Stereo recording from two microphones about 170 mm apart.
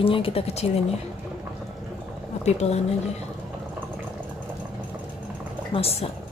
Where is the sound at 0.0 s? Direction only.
30° left (ahead or behind).